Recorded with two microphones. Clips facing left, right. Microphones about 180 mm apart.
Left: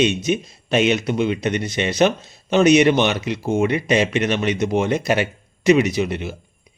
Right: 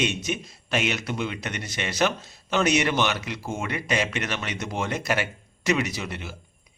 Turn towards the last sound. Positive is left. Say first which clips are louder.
# left 10 dB
turn(degrees=20)  # may be behind; listen again after turning